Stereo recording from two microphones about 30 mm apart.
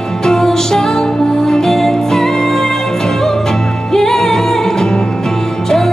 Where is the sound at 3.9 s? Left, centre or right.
Centre.